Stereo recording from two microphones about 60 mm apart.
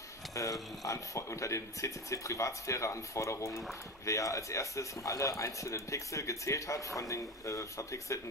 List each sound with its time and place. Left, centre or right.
0.3 s speech: left